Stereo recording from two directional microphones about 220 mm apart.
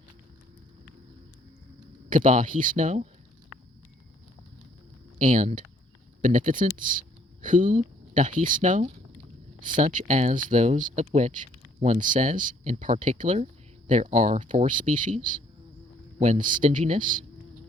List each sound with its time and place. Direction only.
2.0 s speech: 35° right (ahead or behind)
5.2 s speech: 35° right (ahead or behind)